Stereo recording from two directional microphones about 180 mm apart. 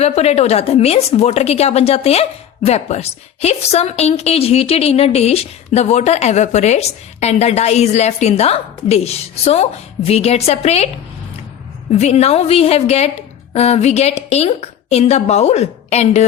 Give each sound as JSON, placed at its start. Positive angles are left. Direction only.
{"t": 0.0, "sound": "a woman's voice", "side_deg": 35}
{"t": 11.9, "sound": "a woman's voice", "side_deg": 40}